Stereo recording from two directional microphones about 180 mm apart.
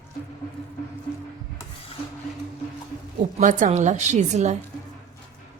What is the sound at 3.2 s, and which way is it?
A woman's voice, 45° right (ahead or behind).